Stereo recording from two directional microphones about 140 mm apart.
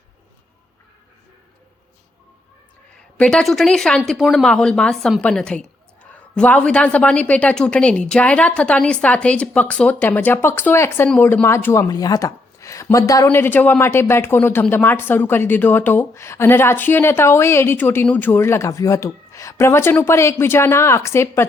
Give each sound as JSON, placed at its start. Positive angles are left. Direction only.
{"t": 3.2, "sound": "speech", "side_deg": 5}